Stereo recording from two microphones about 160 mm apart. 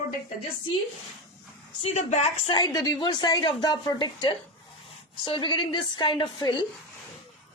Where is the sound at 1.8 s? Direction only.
45° left (ahead or behind).